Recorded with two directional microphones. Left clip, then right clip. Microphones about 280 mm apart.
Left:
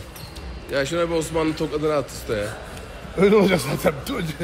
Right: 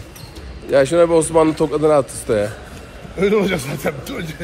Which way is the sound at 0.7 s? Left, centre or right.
Centre.